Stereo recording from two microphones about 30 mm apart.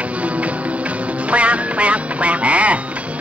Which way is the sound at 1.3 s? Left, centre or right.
Right.